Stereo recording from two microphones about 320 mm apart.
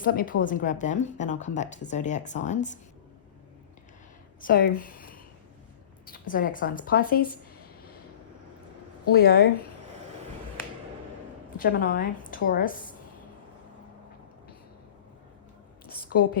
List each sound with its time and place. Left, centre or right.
0.0 s a woman's voice: left
4.4 s a woman's voice: left
9.1 s a woman's voice: left
11.5 s a woman's voice: left
15.9 s a sound: left